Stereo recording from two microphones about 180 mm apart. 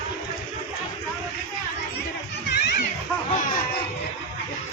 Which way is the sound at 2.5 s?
65° left (ahead or behind).